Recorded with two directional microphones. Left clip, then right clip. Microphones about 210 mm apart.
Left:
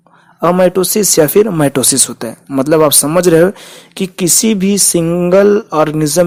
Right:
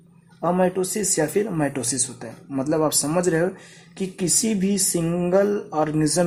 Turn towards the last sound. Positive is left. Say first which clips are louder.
# left 10 dB
turn(degrees=25)  # may be behind; listen again after turning